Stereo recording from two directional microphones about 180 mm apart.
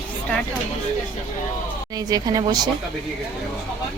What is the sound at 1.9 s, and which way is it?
Speech, 20° right (ahead or behind).